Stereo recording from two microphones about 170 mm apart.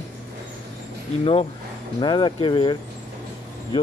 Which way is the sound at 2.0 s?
25° left (ahead or behind).